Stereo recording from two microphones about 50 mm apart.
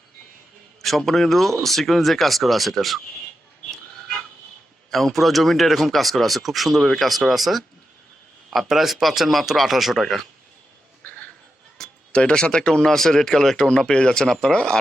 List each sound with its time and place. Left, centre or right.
0.8 s speech: centre
4.9 s speech: centre
11.8 s a sound: centre
12.1 s speech: centre